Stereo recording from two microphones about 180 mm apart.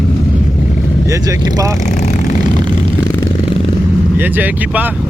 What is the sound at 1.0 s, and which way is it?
Speech, 20° right (ahead or behind).